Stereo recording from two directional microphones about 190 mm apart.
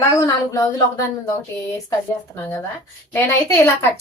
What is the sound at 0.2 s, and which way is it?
A woman's voice, 15° left (ahead or behind).